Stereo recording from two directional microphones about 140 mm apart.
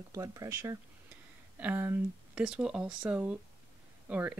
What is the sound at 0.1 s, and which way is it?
Speech, 25° right (ahead or behind).